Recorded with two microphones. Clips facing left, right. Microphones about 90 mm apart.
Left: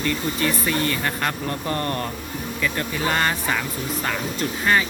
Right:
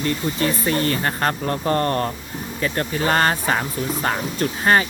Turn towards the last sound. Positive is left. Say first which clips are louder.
# right 3 dB
turn(degrees=-40)  # may be behind; listen again after turning